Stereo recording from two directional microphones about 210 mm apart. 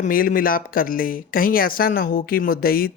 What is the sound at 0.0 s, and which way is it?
Speech, 40° left (ahead or behind).